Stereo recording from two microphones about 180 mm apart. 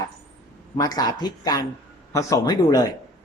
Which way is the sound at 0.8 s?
20° left (ahead or behind).